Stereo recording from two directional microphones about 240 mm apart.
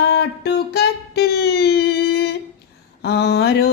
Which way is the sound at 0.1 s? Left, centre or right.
Left.